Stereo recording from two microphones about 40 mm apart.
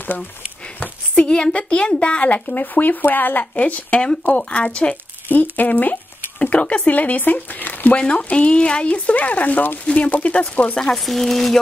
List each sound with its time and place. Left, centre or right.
0.7 s a woman's voice: left
3.5 s a woman's voice: left
5.3 s speech: left
6.4 s speech: left
7.0 s speech: left
7.9 s a woman's voice: left
9.8 s a woman's voice: left
11.0 s speech: centre